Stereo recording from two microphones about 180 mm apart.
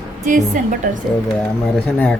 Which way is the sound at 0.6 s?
45° right (ahead or behind).